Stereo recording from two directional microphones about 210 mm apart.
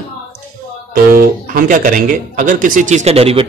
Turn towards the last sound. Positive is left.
turn(degrees=-30)  # may be behind; listen again after turning